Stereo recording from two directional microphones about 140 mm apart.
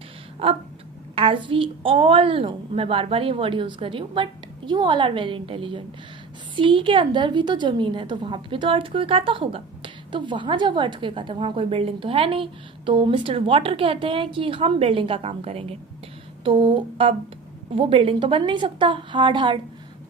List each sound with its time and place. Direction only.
0.4 s a woman's voice: 40° right (ahead or behind)